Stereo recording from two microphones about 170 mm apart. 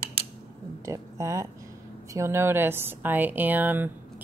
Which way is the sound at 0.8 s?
15° right (ahead or behind).